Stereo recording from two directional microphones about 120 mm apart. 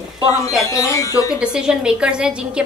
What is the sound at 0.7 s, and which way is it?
Speech, 25° left (ahead or behind).